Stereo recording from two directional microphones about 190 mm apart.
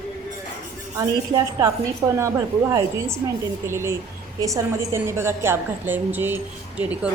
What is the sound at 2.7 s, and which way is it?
A woman's voice, 15° right (ahead or behind).